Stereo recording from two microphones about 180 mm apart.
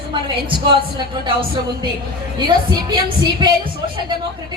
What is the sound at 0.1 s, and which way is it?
A woman's voice, 25° right (ahead or behind).